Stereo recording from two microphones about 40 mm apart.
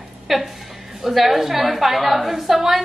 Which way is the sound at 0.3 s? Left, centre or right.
Centre.